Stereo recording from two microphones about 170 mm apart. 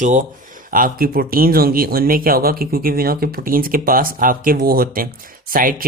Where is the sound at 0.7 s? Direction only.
55° right (ahead or behind).